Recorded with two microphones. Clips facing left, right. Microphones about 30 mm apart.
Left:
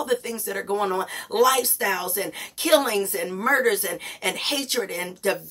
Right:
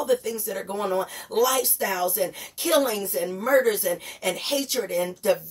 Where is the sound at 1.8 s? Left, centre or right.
Left.